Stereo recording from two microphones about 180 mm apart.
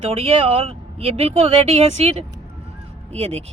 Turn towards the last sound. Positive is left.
turn(degrees=-35)  # may be behind; listen again after turning